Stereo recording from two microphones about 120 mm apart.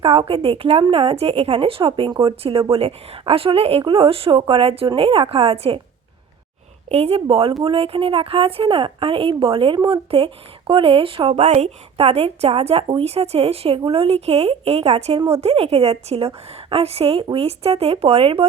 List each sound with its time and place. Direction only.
0.0 s a woman's voice: 55° right (ahead or behind)
6.9 s a woman's voice: 55° right (ahead or behind)
11.3 s a woman's voice: 70° right (ahead or behind); by 18.4 s 55° right (ahead or behind)